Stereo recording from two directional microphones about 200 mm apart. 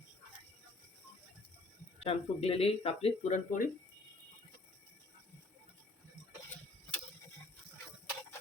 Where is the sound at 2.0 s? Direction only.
30° left (ahead or behind).